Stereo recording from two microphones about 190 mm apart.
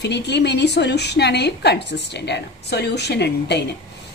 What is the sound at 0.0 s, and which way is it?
A woman's voice, 60° left (ahead or behind).